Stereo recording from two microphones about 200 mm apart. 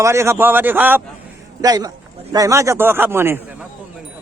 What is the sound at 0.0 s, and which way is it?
Speech, 15° right (ahead or behind).